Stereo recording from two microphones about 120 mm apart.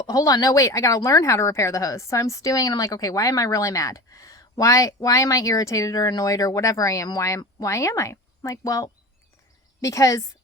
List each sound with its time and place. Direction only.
0.1 s speech: 30° left (ahead or behind)